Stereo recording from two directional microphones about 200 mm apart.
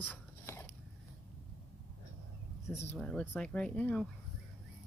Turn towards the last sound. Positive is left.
turn(degrees=5)  # may be behind; listen again after turning